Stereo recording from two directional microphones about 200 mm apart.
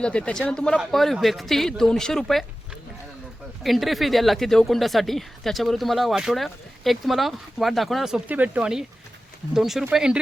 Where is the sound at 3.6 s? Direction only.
Centre (ahead or behind).